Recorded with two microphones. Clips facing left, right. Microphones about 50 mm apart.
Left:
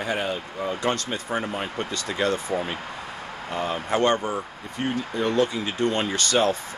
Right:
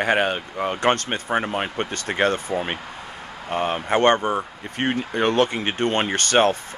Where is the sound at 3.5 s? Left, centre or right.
Right.